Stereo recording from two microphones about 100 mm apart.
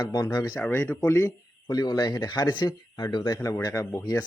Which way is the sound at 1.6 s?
40° left (ahead or behind).